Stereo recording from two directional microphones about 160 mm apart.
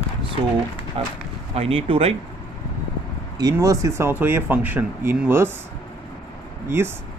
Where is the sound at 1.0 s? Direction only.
35° right (ahead or behind).